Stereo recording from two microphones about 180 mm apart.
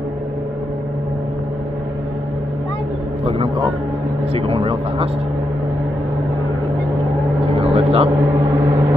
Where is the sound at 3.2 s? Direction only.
30° right (ahead or behind).